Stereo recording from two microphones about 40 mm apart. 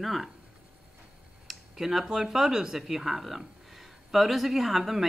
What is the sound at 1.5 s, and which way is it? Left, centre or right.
Speech, centre.